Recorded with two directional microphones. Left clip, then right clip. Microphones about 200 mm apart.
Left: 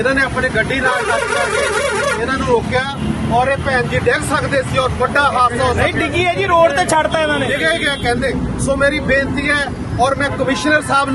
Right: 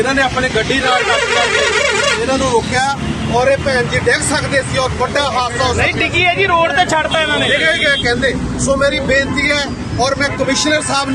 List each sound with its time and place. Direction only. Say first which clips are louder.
3.8 s speech: right 1 dB; 5° right (ahead or behind)
6.1 s speech: even; 65° left (ahead or behind); by 8.1 s 45° left (ahead or behind)
8.8 s speech: even; 10° left (ahead or behind)